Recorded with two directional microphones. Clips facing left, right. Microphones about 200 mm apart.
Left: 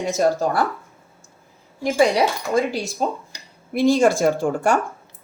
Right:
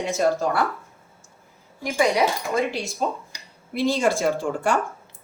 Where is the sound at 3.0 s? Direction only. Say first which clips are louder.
Left 2 dB; 40° left (ahead or behind).